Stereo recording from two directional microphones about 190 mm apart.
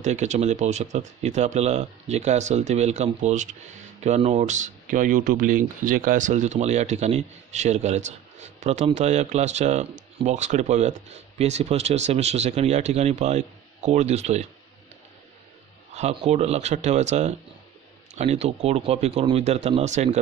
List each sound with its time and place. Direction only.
0.0 s speech: 40° right (ahead or behind)
15.9 s a man's voice: 35° right (ahead or behind)